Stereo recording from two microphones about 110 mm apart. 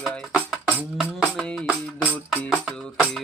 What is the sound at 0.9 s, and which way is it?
Music, centre (ahead or behind).